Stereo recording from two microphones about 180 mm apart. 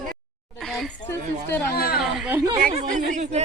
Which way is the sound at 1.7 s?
60° left (ahead or behind).